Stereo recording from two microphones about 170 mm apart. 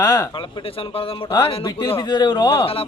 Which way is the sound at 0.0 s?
20° left (ahead or behind).